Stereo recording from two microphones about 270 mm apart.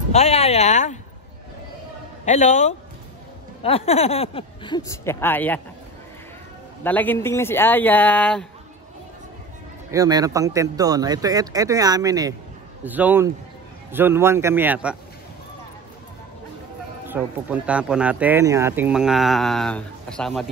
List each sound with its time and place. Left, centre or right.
0.1 s speech: left
2.2 s speech: left; by 5.6 s centre
6.8 s speech: centre
9.8 s a man's voice: centre
17.1 s speech: centre